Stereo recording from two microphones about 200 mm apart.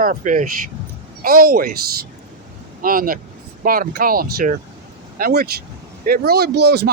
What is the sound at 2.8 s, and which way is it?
Speech, 45° right (ahead or behind).